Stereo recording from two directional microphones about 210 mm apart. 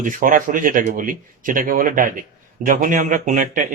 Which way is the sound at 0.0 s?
40° right (ahead or behind).